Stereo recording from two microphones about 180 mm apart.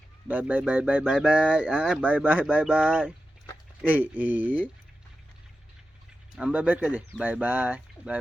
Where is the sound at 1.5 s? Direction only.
5° right (ahead or behind).